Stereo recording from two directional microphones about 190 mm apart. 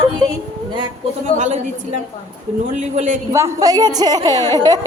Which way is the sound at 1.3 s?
40° right (ahead or behind).